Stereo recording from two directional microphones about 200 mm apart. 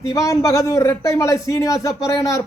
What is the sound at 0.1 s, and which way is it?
A man's voice, 15° left (ahead or behind).